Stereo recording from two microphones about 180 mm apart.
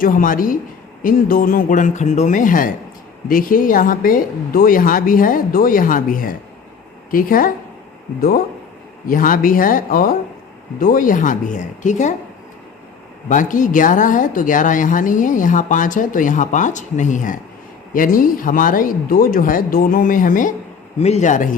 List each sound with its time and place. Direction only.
0.0 s speech: 50° left (ahead or behind)
9.0 s speech: 50° left (ahead or behind)
13.2 s speech: 45° left (ahead or behind)